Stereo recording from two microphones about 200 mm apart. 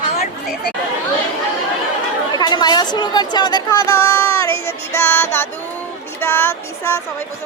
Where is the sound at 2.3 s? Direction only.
20° left (ahead or behind).